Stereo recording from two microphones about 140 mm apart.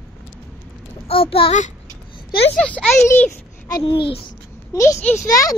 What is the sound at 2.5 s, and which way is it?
Speech, 5° left (ahead or behind).